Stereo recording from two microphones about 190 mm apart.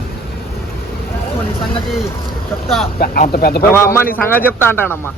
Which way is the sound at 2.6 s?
Centre (ahead or behind).